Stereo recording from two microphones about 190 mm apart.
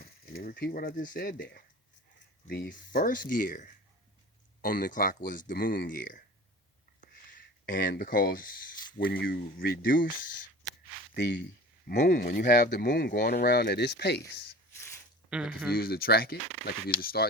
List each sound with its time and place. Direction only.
0.0 s speech: 55° left (ahead or behind)
7.0 s a sound: 45° left (ahead or behind)
9.0 s speech: 50° left (ahead or behind)
11.1 s speech: 65° left (ahead or behind)
11.9 s speech: 50° left (ahead or behind)
15.3 s speech: 5° right (ahead or behind)
15.7 s speech: 50° left (ahead or behind)